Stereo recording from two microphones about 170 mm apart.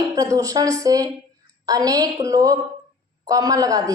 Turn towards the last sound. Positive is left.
turn(degrees=-20)  # may be behind; listen again after turning